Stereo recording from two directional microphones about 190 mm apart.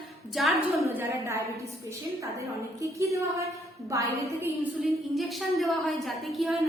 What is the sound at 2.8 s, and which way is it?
A woman's voice, 15° right (ahead or behind).